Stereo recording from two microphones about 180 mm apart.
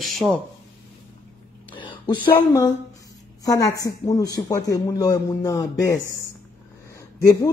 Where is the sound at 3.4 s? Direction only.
20° left (ahead or behind).